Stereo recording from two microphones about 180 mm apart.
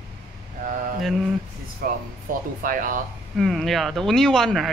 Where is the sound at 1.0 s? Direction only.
Centre (ahead or behind).